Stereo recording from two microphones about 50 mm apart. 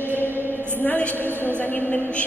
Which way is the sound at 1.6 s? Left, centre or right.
Left.